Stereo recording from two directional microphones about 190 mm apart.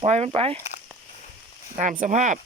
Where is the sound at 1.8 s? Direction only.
40° right (ahead or behind).